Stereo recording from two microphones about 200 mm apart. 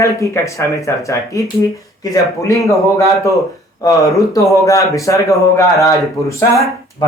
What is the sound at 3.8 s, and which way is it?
Speech, 15° left (ahead or behind).